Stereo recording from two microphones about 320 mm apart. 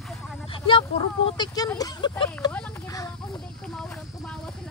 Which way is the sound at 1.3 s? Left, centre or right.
Centre.